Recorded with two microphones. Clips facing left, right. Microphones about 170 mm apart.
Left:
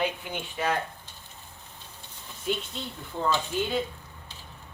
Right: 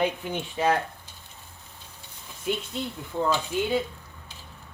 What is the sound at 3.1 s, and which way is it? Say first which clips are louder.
Speech: right 3 dB; 15° right (ahead or behind).